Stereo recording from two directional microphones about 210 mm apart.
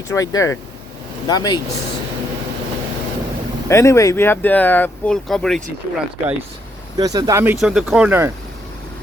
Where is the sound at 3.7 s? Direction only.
15° left (ahead or behind).